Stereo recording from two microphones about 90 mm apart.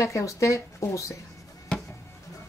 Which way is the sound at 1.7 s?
10° left (ahead or behind).